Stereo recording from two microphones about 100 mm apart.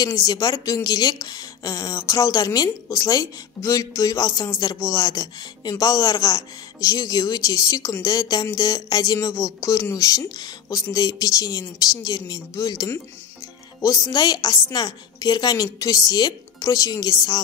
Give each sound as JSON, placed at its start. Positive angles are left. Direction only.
{"t": 0.0, "sound": "speech", "side_deg": 40}